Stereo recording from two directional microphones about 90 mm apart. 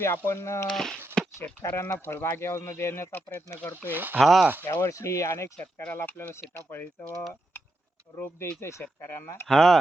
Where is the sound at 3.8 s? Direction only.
20° right (ahead or behind).